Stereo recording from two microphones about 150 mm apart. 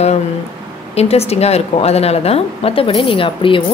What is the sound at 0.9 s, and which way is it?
A woman's voice, 45° left (ahead or behind).